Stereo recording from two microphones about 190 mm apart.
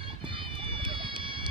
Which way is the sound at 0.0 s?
25° right (ahead or behind).